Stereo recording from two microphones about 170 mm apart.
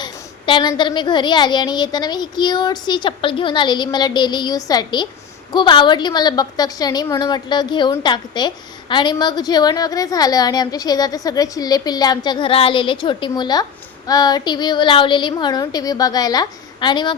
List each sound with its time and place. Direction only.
0.0 s a woman's voice: 25° left (ahead or behind)